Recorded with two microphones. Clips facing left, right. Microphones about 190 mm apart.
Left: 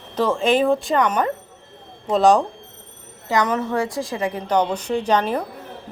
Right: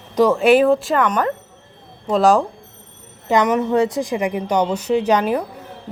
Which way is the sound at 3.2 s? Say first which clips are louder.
Right 4 dB; 15° right (ahead or behind).